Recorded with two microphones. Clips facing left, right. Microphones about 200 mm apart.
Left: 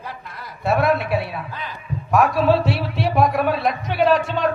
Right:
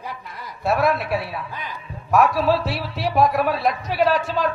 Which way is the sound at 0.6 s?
Centre (ahead or behind).